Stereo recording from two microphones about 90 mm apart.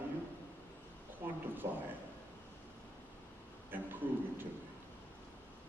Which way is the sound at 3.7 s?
20° right (ahead or behind).